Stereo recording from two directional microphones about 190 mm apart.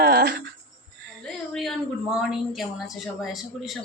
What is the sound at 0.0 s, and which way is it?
Cricket, 55° right (ahead or behind).